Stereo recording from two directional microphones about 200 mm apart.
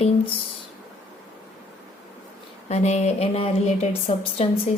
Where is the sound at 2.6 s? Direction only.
35° left (ahead or behind).